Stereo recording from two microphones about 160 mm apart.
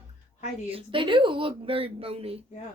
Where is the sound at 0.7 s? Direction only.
35° right (ahead or behind).